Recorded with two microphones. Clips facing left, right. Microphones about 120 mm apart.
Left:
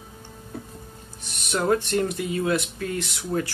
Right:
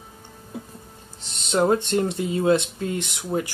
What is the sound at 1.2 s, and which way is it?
Speech, 25° right (ahead or behind).